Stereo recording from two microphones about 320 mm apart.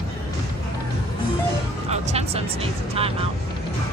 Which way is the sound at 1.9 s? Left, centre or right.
Centre.